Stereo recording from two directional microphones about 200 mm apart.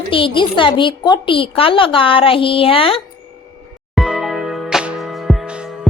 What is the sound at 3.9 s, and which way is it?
Music, centre (ahead or behind).